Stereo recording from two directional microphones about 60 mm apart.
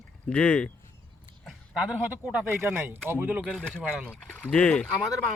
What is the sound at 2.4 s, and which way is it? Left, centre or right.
Speech, right.